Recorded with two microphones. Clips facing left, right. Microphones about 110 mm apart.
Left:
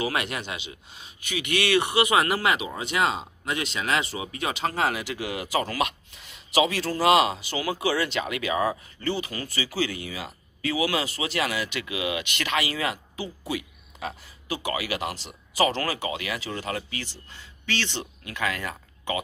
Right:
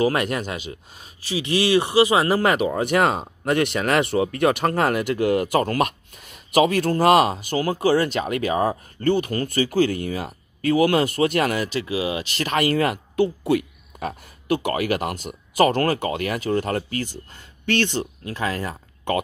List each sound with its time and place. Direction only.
0.0 s speech: 40° right (ahead or behind)
1.3 s speech: 30° right (ahead or behind)
19.1 s speech: 55° right (ahead or behind)